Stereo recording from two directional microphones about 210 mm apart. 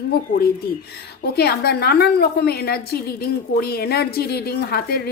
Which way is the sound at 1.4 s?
50° left (ahead or behind).